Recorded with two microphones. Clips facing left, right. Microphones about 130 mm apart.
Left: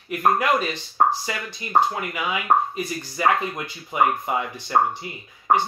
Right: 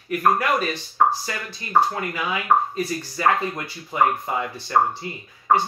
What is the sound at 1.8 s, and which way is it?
Speech, 15° left (ahead or behind).